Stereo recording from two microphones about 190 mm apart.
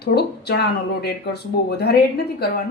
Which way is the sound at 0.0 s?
55° left (ahead or behind).